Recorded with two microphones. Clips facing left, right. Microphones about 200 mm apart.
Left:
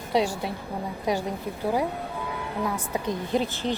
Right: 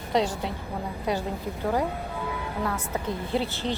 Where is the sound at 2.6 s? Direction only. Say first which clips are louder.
Left 2 dB; 15° left (ahead or behind).